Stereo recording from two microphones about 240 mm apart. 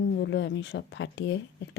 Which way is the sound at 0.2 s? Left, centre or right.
Left.